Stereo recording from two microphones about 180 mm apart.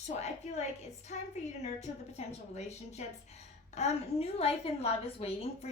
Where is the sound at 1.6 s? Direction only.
40° left (ahead or behind).